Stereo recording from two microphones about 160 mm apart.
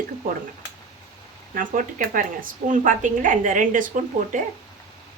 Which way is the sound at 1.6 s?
60° right (ahead or behind).